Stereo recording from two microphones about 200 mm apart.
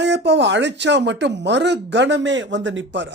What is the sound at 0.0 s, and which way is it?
Speech, 60° right (ahead or behind).